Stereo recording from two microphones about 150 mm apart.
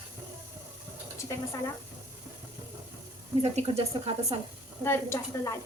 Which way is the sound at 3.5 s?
45° right (ahead or behind).